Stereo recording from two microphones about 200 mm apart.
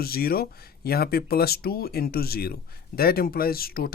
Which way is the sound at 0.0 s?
50° left (ahead or behind).